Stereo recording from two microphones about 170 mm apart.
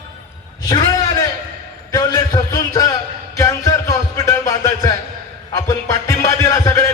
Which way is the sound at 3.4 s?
20° left (ahead or behind).